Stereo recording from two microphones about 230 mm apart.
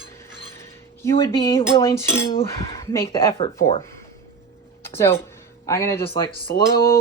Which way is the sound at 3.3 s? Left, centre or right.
Left.